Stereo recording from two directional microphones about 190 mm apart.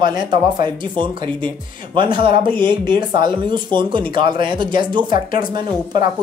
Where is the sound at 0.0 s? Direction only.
25° right (ahead or behind).